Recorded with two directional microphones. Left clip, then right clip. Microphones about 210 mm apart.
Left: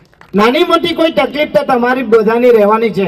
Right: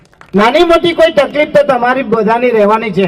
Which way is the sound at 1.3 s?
25° right (ahead or behind).